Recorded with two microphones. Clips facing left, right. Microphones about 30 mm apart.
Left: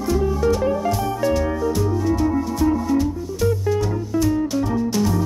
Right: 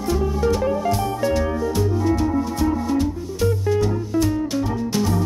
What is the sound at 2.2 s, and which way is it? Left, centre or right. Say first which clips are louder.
Music: left 1 dB; centre.